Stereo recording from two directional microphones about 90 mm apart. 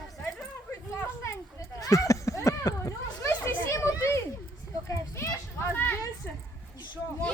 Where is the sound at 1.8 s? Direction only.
40° left (ahead or behind).